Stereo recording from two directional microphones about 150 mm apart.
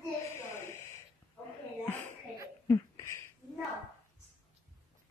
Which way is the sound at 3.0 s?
20° left (ahead or behind).